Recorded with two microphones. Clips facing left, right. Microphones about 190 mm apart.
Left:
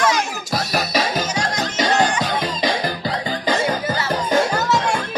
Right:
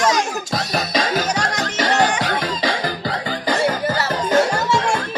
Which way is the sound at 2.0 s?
70° right (ahead or behind).